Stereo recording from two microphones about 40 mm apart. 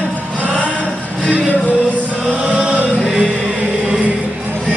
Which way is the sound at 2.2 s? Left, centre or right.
Right.